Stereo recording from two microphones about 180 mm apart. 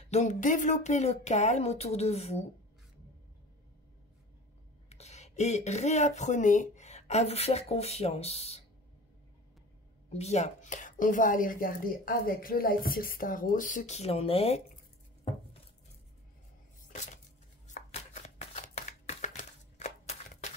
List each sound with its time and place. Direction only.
0.0 s speech: 40° left (ahead or behind)
4.8 s speech: 35° left (ahead or behind)
10.0 s a woman's voice: 35° left (ahead or behind)
17.6 s shuffling cards: 40° left (ahead or behind)